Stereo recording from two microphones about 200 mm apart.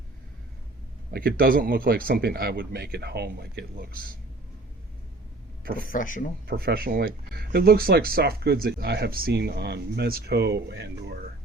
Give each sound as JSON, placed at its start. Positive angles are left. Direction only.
{"t": 1.1, "sound": "speech", "side_deg": -50}
{"t": 5.6, "sound": "speech", "side_deg": -45}
{"t": 5.9, "sound": "speech", "side_deg": 40}
{"t": 6.5, "sound": "speech", "side_deg": -50}